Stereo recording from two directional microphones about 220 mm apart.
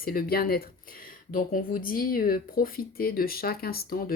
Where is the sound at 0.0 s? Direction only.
40° left (ahead or behind).